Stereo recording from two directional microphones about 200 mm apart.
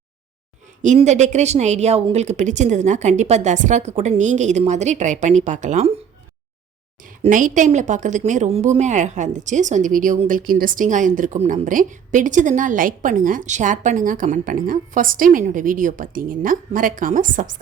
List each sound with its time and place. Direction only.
0.8 s a woman's voice: 35° right (ahead or behind)
7.2 s a woman's voice: 40° right (ahead or behind)